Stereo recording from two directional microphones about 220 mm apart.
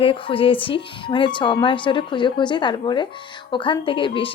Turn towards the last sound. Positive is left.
turn(degrees=25)  # may be behind; listen again after turning